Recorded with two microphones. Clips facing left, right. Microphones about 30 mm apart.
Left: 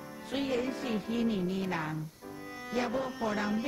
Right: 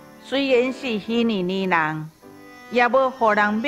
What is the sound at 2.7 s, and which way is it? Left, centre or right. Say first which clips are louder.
Speech: right 15 dB; right.